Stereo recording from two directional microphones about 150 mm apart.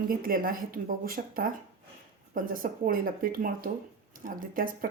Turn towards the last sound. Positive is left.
turn(degrees=-70)  # may be behind; listen again after turning